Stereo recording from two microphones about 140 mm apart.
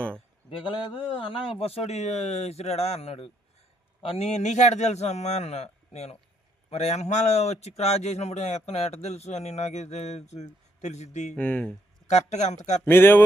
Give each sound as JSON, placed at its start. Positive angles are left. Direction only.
{"t": 0.6, "sound": "a man's voice", "side_deg": 35}
{"t": 11.3, "sound": "speech", "side_deg": 10}
{"t": 12.0, "sound": "a man's voice", "side_deg": 55}
{"t": 12.8, "sound": "speech", "side_deg": 15}